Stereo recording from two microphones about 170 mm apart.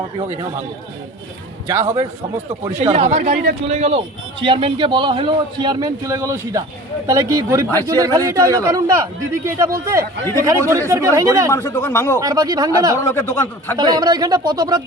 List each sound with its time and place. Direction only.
1.6 s a man's voice: 20° right (ahead or behind)
2.7 s speech: 40° right (ahead or behind)
3.2 s a man's voice: 50° right (ahead or behind); by 11.5 s 20° right (ahead or behind)
11.5 s speech: 15° left (ahead or behind)
12.2 s a man's voice: 20° right (ahead or behind)
13.0 s speech: 15° left (ahead or behind)
13.7 s a man's voice: 25° right (ahead or behind)